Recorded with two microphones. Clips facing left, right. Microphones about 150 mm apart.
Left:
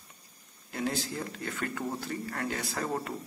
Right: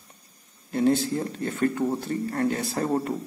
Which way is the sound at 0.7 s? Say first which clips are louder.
Right 11 dB; 25° right (ahead or behind).